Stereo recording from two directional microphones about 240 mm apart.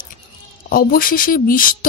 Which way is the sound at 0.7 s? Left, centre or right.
Left.